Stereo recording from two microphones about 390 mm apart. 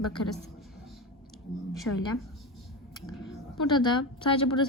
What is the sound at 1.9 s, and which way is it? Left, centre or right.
Speech, left.